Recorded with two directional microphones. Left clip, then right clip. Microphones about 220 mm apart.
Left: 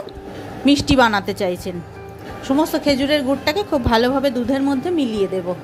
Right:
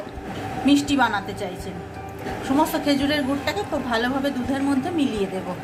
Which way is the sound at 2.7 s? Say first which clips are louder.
Left 4 dB; 35° left (ahead or behind).